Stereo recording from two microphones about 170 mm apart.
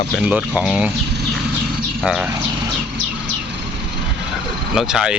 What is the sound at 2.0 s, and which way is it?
Speech, centre (ahead or behind).